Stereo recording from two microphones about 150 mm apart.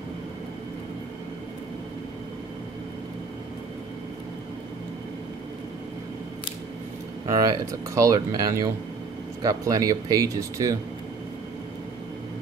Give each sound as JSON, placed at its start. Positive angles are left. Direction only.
{"t": 7.2, "sound": "speech", "side_deg": -20}